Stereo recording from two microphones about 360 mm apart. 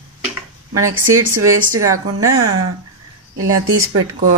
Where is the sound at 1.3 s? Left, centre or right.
Centre.